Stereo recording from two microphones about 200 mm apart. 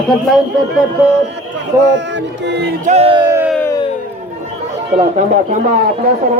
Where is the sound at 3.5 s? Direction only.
10° left (ahead or behind).